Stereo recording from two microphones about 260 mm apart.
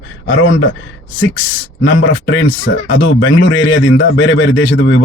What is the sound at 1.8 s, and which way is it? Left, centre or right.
A man's voice, left.